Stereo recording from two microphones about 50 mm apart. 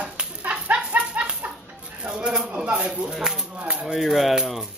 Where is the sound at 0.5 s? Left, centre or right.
Right.